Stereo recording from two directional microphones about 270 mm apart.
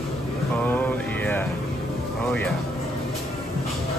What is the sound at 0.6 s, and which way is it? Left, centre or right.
Mantra, centre.